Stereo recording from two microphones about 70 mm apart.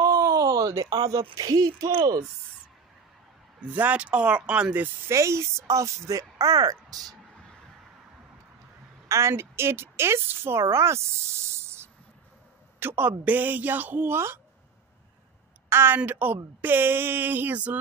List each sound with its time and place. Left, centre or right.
0.0 s speech: right
3.6 s speech: right
5.1 s speech: right
9.3 s a man's voice: right
15.7 s a woman's voice: right